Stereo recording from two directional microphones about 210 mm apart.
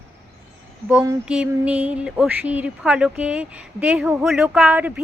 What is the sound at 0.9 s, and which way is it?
Speech, 10° right (ahead or behind).